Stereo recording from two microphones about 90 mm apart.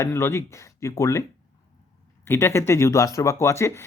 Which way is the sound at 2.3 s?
25° left (ahead or behind).